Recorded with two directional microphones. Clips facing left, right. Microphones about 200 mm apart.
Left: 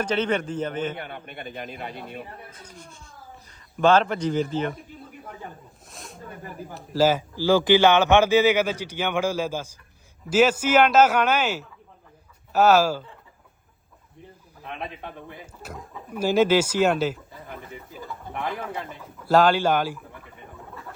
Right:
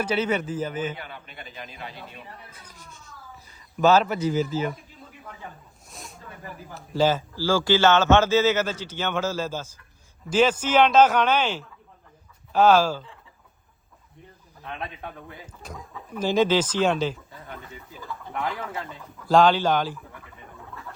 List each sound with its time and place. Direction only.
0.0 s a man's voice: 10° right (ahead or behind)
0.9 s a man's voice: 55° left (ahead or behind)
3.8 s a man's voice: 5° right (ahead or behind)
5.9 s snake: centre (ahead or behind)
6.3 s speech: 45° left (ahead or behind)
6.7 s speech: 5° left (ahead or behind)
14.6 s a man's voice: centre (ahead or behind)